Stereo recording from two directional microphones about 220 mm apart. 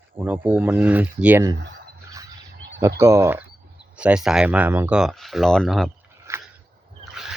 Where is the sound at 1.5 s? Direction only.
55° right (ahead or behind).